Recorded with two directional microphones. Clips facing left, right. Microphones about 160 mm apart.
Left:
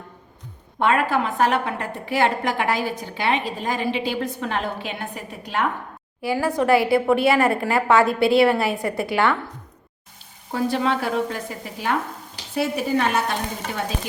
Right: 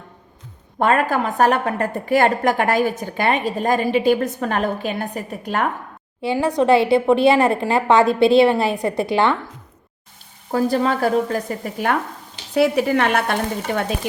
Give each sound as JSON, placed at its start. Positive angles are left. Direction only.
{"t": 0.8, "sound": "a woman's voice", "side_deg": -45}
{"t": 6.2, "sound": "a woman's voice", "side_deg": -20}
{"t": 10.5, "sound": "a woman's voice", "side_deg": -40}
{"t": 12.5, "sound": "speech", "side_deg": -70}